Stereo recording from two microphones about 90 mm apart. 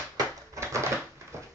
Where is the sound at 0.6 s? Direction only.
30° right (ahead or behind).